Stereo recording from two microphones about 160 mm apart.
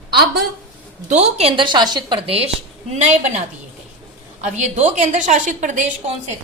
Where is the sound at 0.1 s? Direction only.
85° right.